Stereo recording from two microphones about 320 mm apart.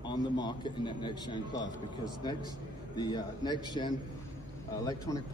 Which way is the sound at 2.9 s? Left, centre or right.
Centre.